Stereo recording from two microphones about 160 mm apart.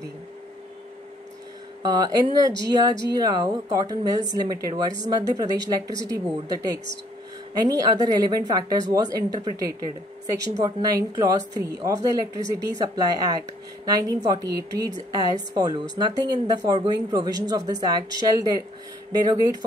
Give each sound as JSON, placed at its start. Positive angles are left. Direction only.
{"t": 1.8, "sound": "speech", "side_deg": -25}